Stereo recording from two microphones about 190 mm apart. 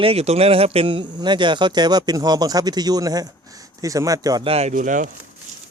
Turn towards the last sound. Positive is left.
turn(degrees=-40)  # may be behind; listen again after turning